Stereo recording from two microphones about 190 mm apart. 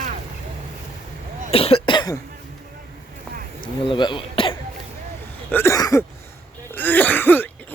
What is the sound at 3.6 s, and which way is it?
Speech, 25° left (ahead or behind).